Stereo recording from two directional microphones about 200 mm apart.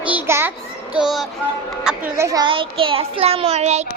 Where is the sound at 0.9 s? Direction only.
Centre (ahead or behind).